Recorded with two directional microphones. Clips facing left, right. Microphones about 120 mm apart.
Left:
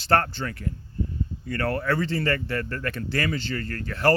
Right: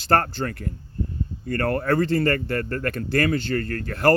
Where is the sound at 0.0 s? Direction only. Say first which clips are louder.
Right 2 dB; 40° right (ahead or behind).